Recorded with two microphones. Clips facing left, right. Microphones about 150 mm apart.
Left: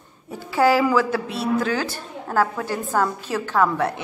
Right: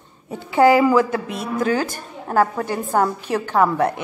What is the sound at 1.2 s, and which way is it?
Speech, 50° right (ahead or behind).